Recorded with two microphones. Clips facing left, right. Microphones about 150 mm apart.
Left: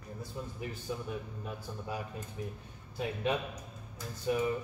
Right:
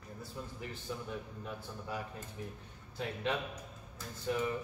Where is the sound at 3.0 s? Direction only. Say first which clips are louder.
Left 3 dB; 10° left (ahead or behind).